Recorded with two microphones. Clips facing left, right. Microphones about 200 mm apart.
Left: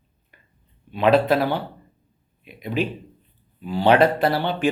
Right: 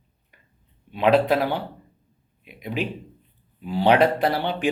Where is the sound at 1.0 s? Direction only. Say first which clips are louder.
Left 1 dB; 15° right (ahead or behind).